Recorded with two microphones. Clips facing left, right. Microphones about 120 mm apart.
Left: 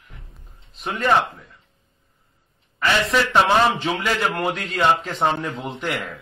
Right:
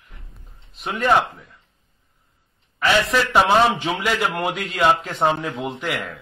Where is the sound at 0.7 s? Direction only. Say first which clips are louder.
Right 1 dB; 5° right (ahead or behind).